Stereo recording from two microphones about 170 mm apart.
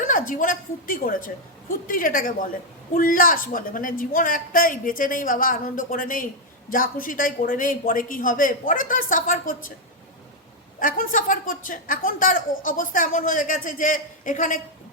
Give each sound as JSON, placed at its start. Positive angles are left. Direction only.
{"t": 0.1, "sound": "a woman's voice", "side_deg": 50}
{"t": 10.8, "sound": "a woman's voice", "side_deg": 55}